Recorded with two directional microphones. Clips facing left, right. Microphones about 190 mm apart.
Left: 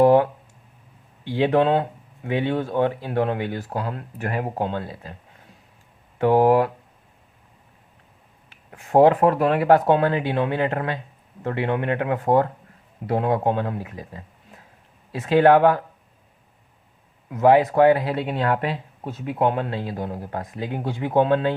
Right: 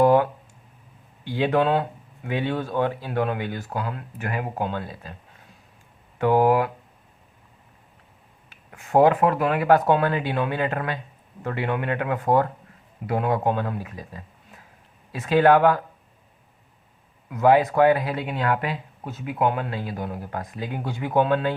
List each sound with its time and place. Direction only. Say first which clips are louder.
0.0 s a sound: left 2 dB; 25° left (ahead or behind)
1.2 s speech: left 2 dB; 25° left (ahead or behind)
6.1 s speech: left 2 dB; 30° left (ahead or behind)
8.4 s speech: left 1 dB; 30° left (ahead or behind)
17.2 s speech: left 2 dB; 25° left (ahead or behind)